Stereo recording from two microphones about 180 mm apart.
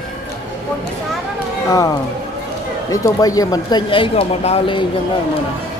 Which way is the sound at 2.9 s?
20° left (ahead or behind).